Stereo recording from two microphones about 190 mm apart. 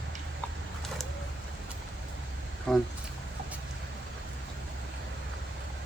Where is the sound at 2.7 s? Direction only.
Centre (ahead or behind).